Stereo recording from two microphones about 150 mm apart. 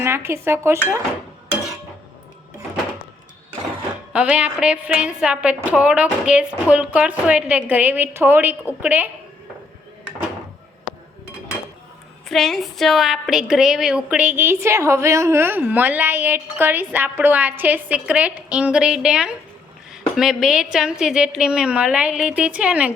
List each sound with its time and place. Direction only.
0.0 s a woman's voice: 15° right (ahead or behind)
4.1 s a woman's voice: 10° right (ahead or behind)
12.3 s a woman's voice: centre (ahead or behind)